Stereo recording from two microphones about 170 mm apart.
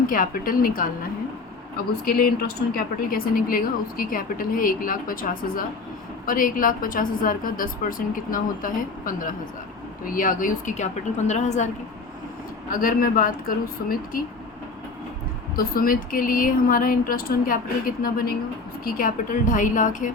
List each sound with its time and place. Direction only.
0.1 s a woman's voice: 55° left (ahead or behind)
2.0 s a woman's voice: 60° left (ahead or behind); by 11.7 s 40° left (ahead or behind)
12.7 s a woman's voice: 55° left (ahead or behind)
15.5 s a woman's voice: 55° left (ahead or behind)